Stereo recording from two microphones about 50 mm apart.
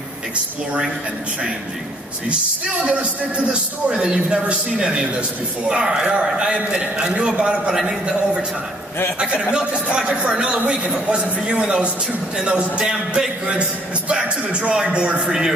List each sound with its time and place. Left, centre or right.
2.8 s a man's voice: right